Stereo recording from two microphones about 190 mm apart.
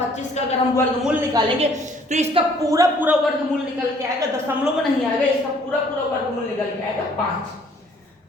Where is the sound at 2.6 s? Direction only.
15° right (ahead or behind).